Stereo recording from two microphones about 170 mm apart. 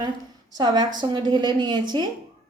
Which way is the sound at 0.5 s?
25° right (ahead or behind).